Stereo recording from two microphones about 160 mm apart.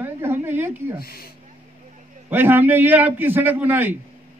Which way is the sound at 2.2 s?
10° right (ahead or behind).